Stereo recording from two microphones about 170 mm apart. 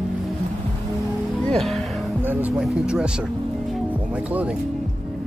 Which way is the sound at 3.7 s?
10° right (ahead or behind).